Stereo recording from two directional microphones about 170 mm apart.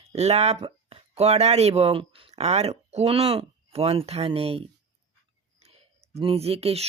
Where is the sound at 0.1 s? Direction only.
40° right (ahead or behind).